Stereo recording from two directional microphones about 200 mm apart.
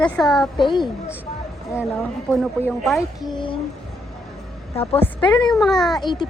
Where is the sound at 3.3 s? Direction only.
25° left (ahead or behind).